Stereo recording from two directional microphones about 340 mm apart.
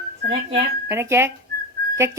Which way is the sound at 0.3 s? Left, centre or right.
Centre.